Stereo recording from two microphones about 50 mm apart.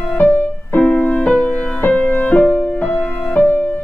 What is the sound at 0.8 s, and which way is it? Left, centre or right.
Music, left.